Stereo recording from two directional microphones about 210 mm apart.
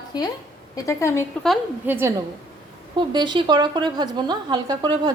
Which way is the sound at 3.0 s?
20° right (ahead or behind).